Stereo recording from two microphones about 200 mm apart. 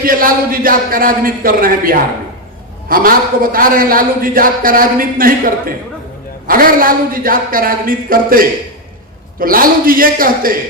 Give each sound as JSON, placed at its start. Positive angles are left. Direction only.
{"t": 0.0, "sound": "a man's voice", "side_deg": -45}